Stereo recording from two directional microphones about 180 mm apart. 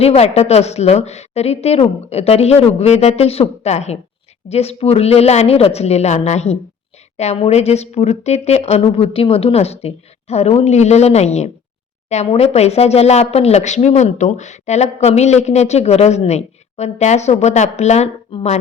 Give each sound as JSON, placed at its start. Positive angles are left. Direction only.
{"t": 0.0, "sound": "speech", "side_deg": 35}